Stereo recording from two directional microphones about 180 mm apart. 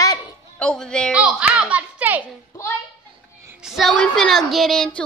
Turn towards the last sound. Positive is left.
turn(degrees=5)  # may be behind; listen again after turning